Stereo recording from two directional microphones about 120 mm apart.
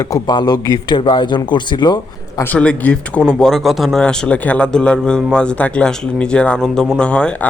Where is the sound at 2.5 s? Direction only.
10° left (ahead or behind).